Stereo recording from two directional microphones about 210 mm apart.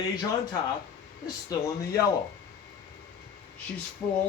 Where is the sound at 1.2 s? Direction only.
20° left (ahead or behind).